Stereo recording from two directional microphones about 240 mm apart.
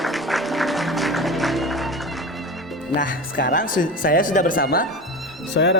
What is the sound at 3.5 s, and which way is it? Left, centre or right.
A woman's voice, left.